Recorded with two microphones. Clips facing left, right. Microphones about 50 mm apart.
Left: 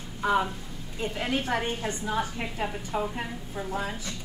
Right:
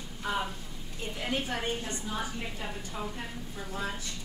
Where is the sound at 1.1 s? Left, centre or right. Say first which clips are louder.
Left 3 dB; left.